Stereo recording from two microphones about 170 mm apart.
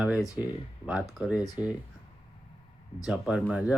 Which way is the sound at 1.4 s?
20° left (ahead or behind).